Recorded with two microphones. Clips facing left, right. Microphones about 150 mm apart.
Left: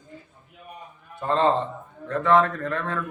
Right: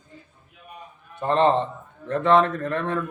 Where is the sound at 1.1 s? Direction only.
20° right (ahead or behind).